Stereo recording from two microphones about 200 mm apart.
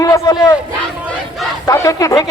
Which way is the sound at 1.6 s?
15° left (ahead or behind).